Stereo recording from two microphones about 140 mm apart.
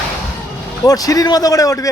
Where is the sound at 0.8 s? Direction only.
25° left (ahead or behind).